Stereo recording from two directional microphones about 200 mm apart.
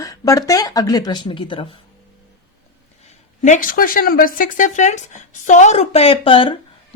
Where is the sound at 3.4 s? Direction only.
40° left (ahead or behind).